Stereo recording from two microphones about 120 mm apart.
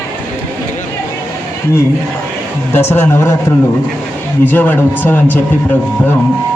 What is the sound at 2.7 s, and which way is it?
A man's voice, 20° left (ahead or behind).